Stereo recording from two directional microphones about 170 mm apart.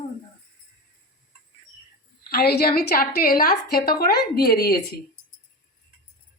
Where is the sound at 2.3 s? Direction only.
70° left (ahead or behind).